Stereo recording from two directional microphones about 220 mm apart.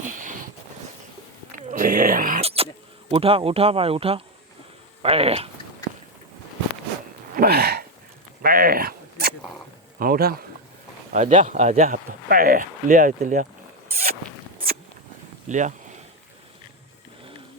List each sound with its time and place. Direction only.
0.0 s a sound: 35° right (ahead or behind)
1.7 s speech: 35° right (ahead or behind)
2.4 s a sound: 25° right (ahead or behind)
3.1 s speech: 25° right (ahead or behind)
7.3 s gasp: 45° right (ahead or behind)
8.4 s a sound: 40° right (ahead or behind)
10.0 s speech: 45° right (ahead or behind)
11.1 s speech: 35° right (ahead or behind)
15.4 s speech: 35° right (ahead or behind)